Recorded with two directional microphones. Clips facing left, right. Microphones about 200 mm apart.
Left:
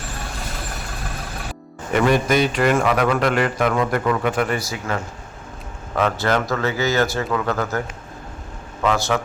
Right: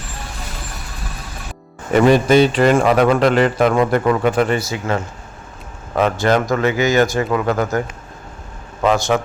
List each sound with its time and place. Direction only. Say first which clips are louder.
1.9 s a man's voice: right 6 dB; 30° right (ahead or behind)
8.8 s a man's voice: right 4 dB; 20° right (ahead or behind)